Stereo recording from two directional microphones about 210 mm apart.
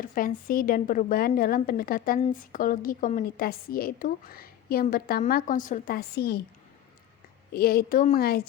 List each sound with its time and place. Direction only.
0.0 s a woman's voice: 40° left (ahead or behind)
7.5 s a woman's voice: 45° left (ahead or behind)